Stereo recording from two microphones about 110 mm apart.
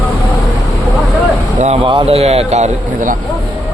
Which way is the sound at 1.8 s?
55° right (ahead or behind).